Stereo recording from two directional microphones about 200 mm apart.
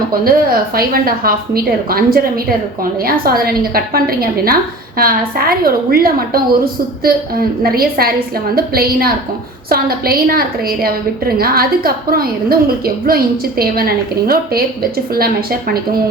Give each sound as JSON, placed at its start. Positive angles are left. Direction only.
{"t": 0.1, "sound": "a woman's voice", "side_deg": -45}